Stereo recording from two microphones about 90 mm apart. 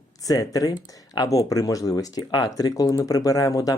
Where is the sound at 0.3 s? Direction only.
40° left (ahead or behind).